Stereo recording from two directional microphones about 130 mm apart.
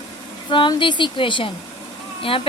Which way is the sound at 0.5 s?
40° left (ahead or behind).